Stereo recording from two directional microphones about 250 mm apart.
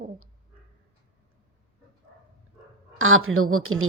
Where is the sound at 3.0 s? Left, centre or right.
Right.